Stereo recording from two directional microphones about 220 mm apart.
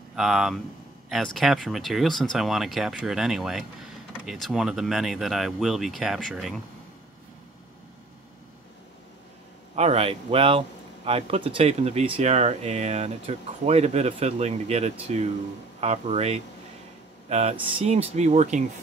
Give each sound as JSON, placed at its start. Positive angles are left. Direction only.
{"t": 0.1, "sound": "speech", "side_deg": 0}
{"t": 9.8, "sound": "speech", "side_deg": -25}